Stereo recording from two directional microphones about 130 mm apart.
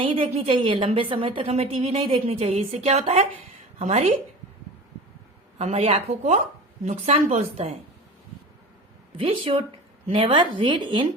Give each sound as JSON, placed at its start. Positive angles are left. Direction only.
{"t": 0.0, "sound": "a woman's voice", "side_deg": -45}
{"t": 5.5, "sound": "speech", "side_deg": -55}
{"t": 9.1, "sound": "a woman's voice", "side_deg": -45}